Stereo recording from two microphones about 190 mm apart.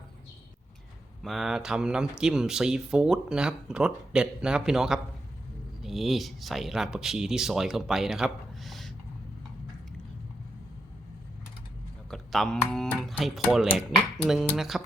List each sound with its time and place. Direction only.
1.2 s speech: centre (ahead or behind)
12.1 s speech: centre (ahead or behind)